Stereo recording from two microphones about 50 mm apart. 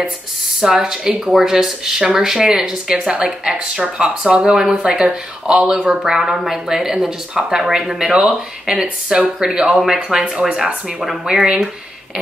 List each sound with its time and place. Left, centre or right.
0.6 s speech: centre
3.0 s a woman's voice: right